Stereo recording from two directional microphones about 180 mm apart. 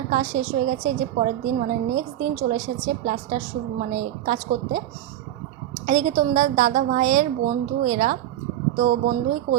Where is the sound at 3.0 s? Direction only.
45° right (ahead or behind).